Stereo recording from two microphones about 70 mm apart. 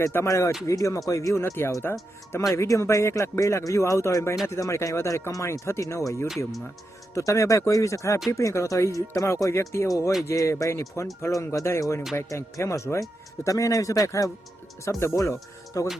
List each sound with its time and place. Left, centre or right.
0.0 s speech: left
2.6 s speech: left
14.8 s speech: left